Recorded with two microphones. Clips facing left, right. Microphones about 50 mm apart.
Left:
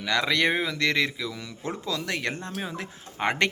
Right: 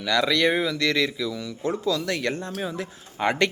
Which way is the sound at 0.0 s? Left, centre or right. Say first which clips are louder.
Right 3 dB; left.